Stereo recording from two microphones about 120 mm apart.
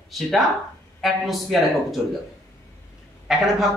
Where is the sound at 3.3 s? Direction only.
5° right (ahead or behind).